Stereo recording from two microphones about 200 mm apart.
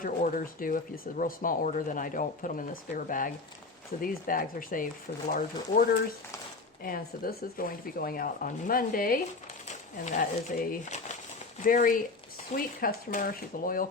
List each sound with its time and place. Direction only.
0.0 s speech: 40° left (ahead or behind)
6.8 s speech: 45° left (ahead or behind)